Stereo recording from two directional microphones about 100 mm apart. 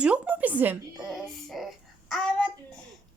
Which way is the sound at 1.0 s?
Centre (ahead or behind).